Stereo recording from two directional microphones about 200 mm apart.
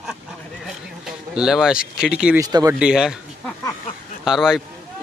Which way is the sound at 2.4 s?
15° right (ahead or behind).